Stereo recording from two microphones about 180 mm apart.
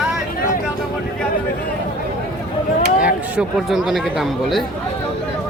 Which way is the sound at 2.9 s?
5° right (ahead or behind).